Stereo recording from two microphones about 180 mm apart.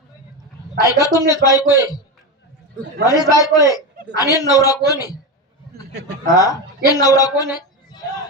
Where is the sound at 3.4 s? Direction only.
20° left (ahead or behind).